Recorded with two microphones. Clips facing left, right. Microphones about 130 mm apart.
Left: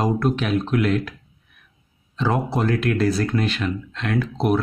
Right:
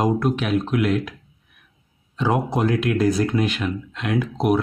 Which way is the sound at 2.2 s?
10° right (ahead or behind).